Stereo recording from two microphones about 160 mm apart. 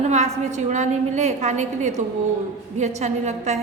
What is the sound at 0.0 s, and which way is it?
A woman's voice, 45° right (ahead or behind).